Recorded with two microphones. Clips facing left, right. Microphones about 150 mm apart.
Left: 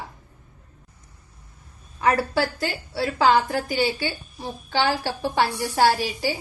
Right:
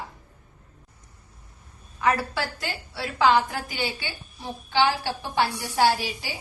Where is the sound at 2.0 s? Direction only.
35° left (ahead or behind).